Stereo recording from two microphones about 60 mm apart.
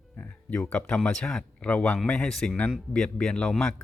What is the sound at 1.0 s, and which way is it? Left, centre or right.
Speech, centre.